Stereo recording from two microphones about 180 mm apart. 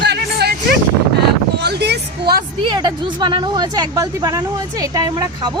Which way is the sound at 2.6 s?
25° right (ahead or behind).